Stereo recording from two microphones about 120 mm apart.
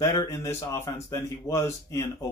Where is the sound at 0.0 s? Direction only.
30° left (ahead or behind).